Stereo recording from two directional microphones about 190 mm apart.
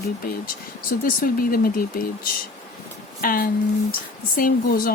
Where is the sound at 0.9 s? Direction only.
50° left (ahead or behind).